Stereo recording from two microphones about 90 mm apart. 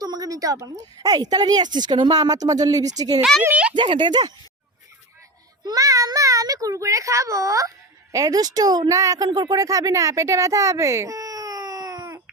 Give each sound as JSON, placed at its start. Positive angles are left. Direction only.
{"t": 0.0, "sound": "a sound", "side_deg": -45}
{"t": 0.6, "sound": "speech", "side_deg": -45}
{"t": 3.5, "sound": "speech", "side_deg": -15}
{"t": 3.8, "sound": "speech", "side_deg": -60}
{"t": 5.6, "sound": "a child's voice", "side_deg": -45}